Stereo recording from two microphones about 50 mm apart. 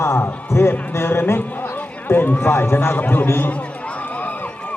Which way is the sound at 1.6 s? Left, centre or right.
Left.